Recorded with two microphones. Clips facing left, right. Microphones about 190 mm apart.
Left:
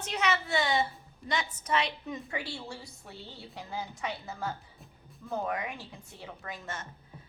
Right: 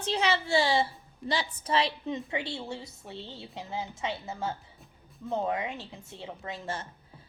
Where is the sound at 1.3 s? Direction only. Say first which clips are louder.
Right 2 dB; 30° right (ahead or behind).